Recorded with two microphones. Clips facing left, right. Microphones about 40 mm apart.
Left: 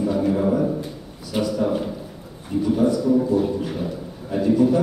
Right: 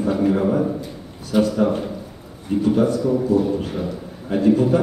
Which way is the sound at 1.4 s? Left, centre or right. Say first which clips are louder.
Right 4 dB; right.